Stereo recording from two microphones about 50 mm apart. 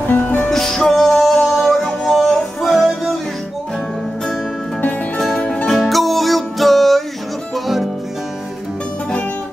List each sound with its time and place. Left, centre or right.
0.5 s music: centre
5.4 s music: left
5.7 s music: centre